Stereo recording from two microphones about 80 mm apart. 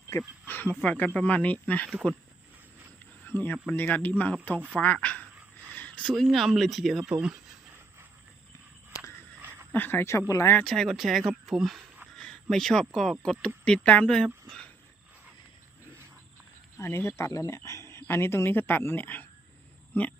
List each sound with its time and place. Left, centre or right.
0.1 s speech: left
3.2 s speech: left
5.7 s a sound: centre
6.1 s speech: centre
9.4 s a sound: right
9.7 s speech: left
10.6 s speech: centre
12.1 s a sound: centre
12.9 s speech: centre
13.7 s speech: centre
16.7 s speech: left